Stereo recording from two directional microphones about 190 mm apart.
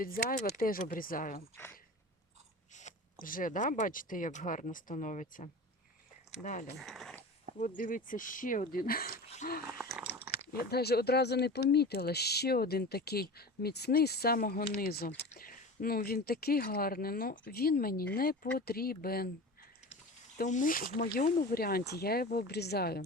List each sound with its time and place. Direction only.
0.0 s speech: 50° left (ahead or behind)
2.7 s speech: 45° left (ahead or behind)
6.7 s speech: centre (ahead or behind)
7.8 s speech: 45° left (ahead or behind)
9.7 s a sound: centre (ahead or behind)
10.7 s speech: 55° left (ahead or behind)
20.4 s speech: 45° left (ahead or behind)